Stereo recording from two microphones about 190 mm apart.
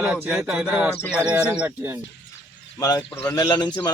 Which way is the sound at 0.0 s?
10° right (ahead or behind).